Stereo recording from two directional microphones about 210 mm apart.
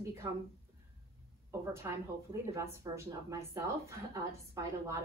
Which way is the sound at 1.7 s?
15° right (ahead or behind).